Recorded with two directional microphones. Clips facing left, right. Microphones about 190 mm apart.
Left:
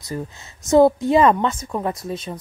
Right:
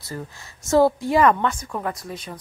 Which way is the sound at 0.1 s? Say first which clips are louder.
Left 5 dB; 15° left (ahead or behind).